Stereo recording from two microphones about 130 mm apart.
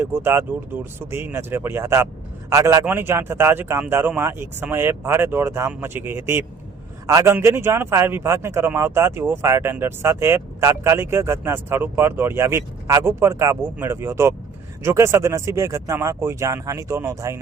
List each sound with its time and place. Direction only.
0.0 s speech: 20° right (ahead or behind)